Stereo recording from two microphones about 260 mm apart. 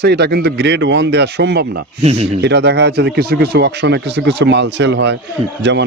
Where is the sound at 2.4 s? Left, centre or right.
Right.